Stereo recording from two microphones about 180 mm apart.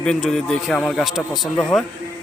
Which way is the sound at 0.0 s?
5° left (ahead or behind).